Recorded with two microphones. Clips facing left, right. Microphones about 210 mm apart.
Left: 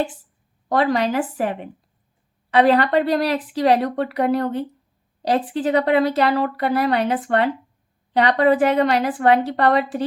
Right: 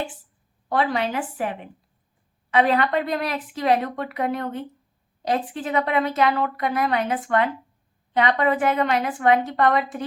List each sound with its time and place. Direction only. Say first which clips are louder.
0.7 s speech: left 4 dB; 40° left (ahead or behind)